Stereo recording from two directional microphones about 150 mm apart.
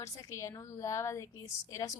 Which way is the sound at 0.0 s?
20° left (ahead or behind).